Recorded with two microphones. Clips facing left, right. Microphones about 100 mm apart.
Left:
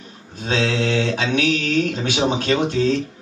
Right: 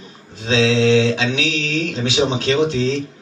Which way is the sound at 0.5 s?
50° left (ahead or behind).